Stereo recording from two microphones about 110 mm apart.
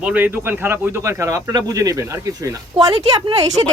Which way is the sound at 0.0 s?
15° right (ahead or behind).